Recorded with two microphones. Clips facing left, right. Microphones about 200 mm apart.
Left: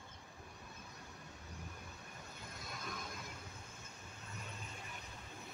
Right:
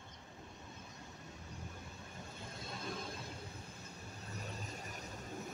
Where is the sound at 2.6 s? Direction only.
30° right (ahead or behind).